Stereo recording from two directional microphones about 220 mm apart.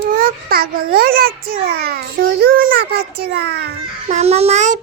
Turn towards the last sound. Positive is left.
turn(degrees=-35)  # may be behind; listen again after turning